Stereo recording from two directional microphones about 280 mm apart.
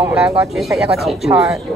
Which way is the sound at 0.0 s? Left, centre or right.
Centre.